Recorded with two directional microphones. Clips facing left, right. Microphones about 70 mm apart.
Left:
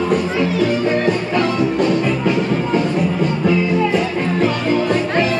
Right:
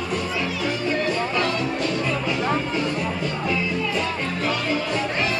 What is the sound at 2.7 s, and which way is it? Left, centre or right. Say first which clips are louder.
Music: left 8 dB; left.